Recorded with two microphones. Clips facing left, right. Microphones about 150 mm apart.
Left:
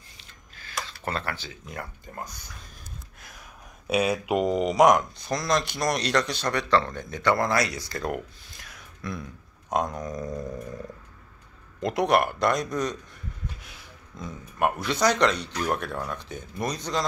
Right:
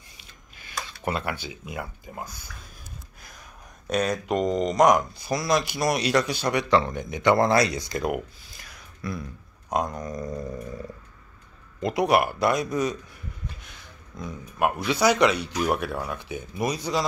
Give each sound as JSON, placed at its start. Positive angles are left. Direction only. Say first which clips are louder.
{"t": 0.2, "sound": "a sound", "louder": "left 1 dB", "side_deg": -15}
{"t": 1.0, "sound": "speech", "louder": "right 4 dB", "side_deg": -10}
{"t": 7.3, "sound": "speech", "louder": "right 4 dB", "side_deg": -25}
{"t": 8.5, "sound": "speech", "louder": "even", "side_deg": 0}